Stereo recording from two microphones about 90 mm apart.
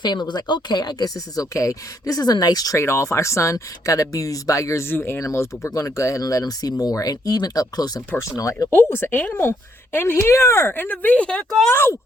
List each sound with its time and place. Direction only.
0.0 s speech: 55° left (ahead or behind); by 8.7 s 40° left (ahead or behind)
8.7 s a woman's voice: 25° left (ahead or behind)
11.7 s a woman's voice: 25° left (ahead or behind)